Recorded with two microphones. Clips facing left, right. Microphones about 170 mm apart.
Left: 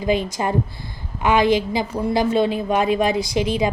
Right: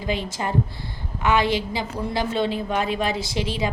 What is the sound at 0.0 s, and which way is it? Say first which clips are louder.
A woman's voice: left 6 dB; 15° left (ahead or behind).